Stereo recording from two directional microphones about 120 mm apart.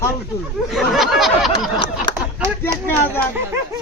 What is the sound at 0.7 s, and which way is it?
Snicker, centre (ahead or behind).